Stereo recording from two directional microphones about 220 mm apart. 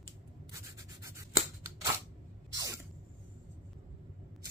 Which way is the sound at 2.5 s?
15° right (ahead or behind).